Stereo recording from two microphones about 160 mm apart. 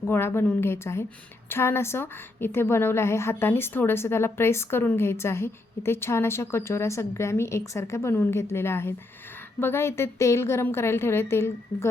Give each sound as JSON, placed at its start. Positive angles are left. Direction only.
{"t": 0.0, "sound": "a woman's voice", "side_deg": 15}